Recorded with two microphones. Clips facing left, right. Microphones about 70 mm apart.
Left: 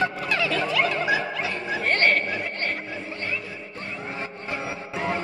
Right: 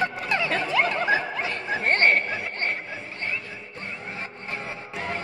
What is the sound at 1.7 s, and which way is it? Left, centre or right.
Chatter, right.